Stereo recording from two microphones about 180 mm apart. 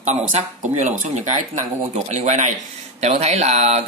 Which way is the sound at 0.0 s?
40° right (ahead or behind).